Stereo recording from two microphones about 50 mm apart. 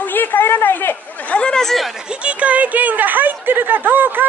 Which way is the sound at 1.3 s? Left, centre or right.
Left.